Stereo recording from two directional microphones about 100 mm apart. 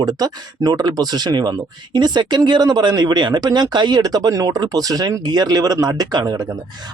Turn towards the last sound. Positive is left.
turn(degrees=-45)  # may be behind; listen again after turning